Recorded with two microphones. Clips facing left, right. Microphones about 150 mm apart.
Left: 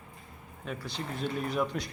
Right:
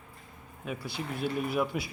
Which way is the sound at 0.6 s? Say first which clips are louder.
Right 1 dB; 10° right (ahead or behind).